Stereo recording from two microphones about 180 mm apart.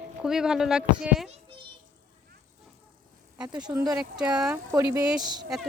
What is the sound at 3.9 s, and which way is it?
Speech, 5° right (ahead or behind).